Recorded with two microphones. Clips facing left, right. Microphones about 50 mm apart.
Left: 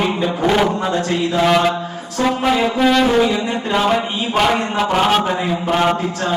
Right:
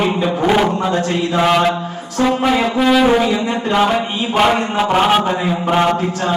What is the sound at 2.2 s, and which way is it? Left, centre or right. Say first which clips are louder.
Speech: right 2 dB; centre.